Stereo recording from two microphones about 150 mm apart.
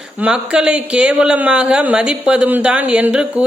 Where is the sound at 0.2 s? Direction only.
5° right (ahead or behind).